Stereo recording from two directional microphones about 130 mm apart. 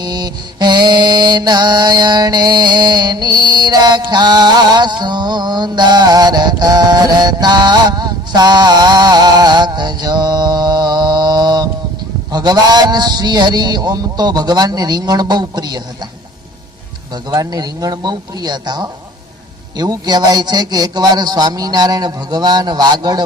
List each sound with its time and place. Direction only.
0.0 s mantra: 30° right (ahead or behind)
17.2 s mantra: 30° right (ahead or behind)